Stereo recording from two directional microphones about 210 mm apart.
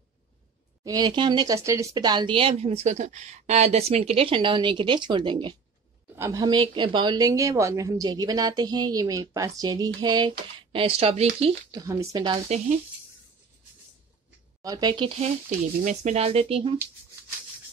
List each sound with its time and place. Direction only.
0.8 s speech: 20° right (ahead or behind)
11.7 s speech: 15° right (ahead or behind)
14.6 s speech: 20° right (ahead or behind)